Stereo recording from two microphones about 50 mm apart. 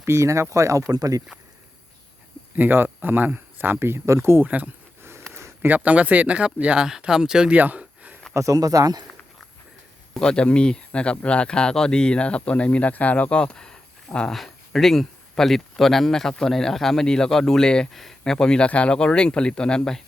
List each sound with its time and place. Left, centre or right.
0.0 s speech: right
2.6 s speech: right
4.4 s speech: right
5.0 s a sound: right
5.6 s speech: right; by 7.5 s centre
7.5 s a sound: right
8.3 s speech: right
10.2 s speech: centre
13.4 s a sound: centre
14.3 s speech: centre
17.9 s speech: centre
18.2 s speech: centre